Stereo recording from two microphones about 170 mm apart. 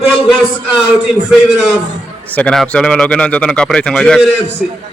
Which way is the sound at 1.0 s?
Centre (ahead or behind).